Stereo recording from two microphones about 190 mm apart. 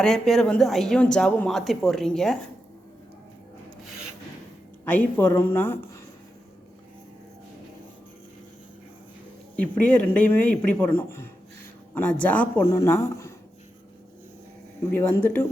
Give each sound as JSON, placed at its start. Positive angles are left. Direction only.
{"t": 0.0, "sound": "speech", "side_deg": 0}
{"t": 4.9, "sound": "a man's voice", "side_deg": 10}
{"t": 9.6, "sound": "a man's voice", "side_deg": 5}
{"t": 14.9, "sound": "a man's voice", "side_deg": 10}